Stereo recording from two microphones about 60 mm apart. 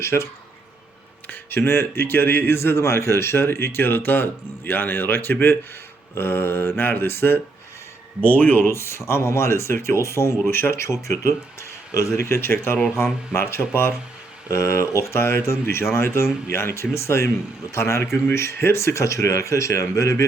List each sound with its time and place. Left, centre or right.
0.0 s speech: left
1.3 s speech: left
8.2 s speech: left
14.4 s speech: left